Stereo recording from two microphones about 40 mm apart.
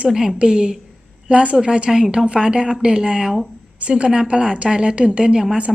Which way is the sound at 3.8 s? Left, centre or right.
Right.